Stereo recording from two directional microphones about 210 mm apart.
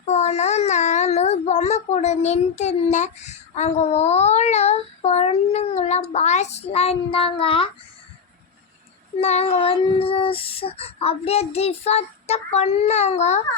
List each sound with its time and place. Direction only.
0.1 s a child's voice: 30° left (ahead or behind)
9.2 s child singing: 30° left (ahead or behind)